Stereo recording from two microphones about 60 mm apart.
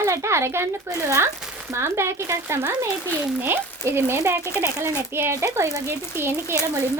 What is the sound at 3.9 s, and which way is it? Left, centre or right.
A child's voice, right.